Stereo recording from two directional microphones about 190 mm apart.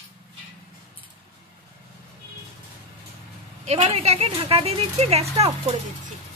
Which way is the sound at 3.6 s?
35° right (ahead or behind).